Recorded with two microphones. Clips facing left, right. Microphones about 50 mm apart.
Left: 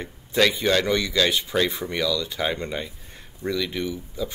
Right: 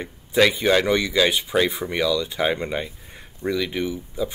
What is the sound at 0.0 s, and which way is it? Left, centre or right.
Speech, centre.